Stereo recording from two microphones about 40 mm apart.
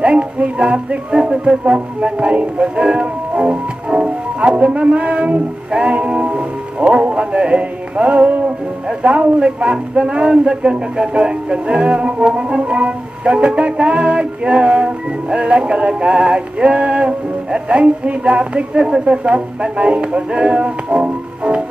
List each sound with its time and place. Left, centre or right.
0.0 s music: right
6.3 s speech: right
10.4 s music: right
18.7 s music: centre